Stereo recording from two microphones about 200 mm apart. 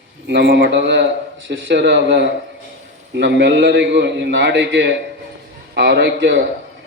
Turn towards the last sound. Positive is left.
turn(degrees=-60)  # may be behind; listen again after turning